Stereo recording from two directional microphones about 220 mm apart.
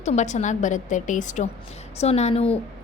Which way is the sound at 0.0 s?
30° left (ahead or behind).